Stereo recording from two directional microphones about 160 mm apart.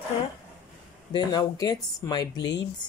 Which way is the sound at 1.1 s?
25° left (ahead or behind).